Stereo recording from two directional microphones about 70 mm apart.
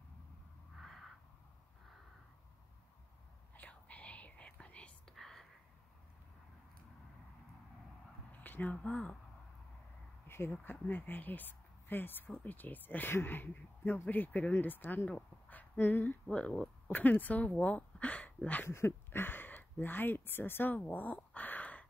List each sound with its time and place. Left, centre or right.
0.7 s a sound: centre
3.5 s whispering: left
5.1 s whispering: centre
8.3 s speech: left
10.2 s speech: left
18.7 s speech: left